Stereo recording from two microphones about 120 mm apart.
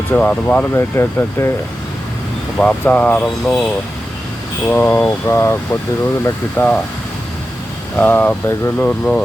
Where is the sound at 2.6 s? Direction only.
15° left (ahead or behind).